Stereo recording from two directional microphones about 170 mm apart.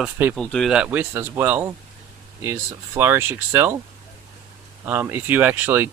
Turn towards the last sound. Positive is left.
turn(degrees=-10)  # may be behind; listen again after turning